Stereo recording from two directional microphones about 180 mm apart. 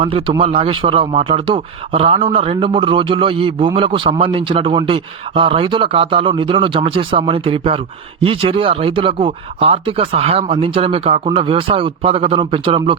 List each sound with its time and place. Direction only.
0.0 s a man's voice: 30° right (ahead or behind)